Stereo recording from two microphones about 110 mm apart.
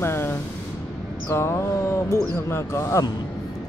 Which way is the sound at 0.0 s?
20° left (ahead or behind).